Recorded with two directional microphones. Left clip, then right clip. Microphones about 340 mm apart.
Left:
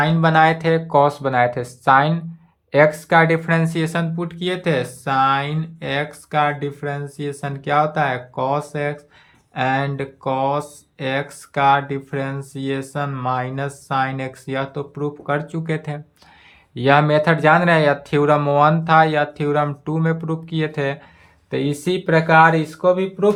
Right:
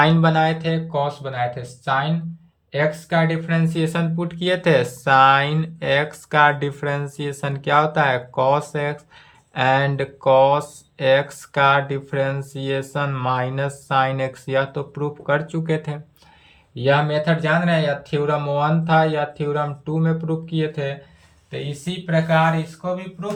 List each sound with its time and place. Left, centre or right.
0.0 s speech: centre